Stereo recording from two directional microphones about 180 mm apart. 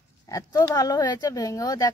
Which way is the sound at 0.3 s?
20° left (ahead or behind).